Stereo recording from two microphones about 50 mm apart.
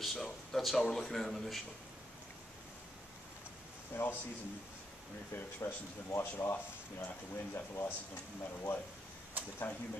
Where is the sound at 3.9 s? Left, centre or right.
Left.